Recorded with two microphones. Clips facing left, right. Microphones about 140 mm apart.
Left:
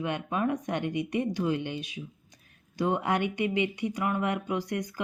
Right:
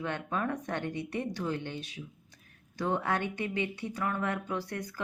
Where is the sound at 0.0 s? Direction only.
15° left (ahead or behind).